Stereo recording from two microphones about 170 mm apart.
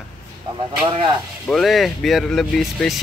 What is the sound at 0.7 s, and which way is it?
Speech, 30° right (ahead or behind).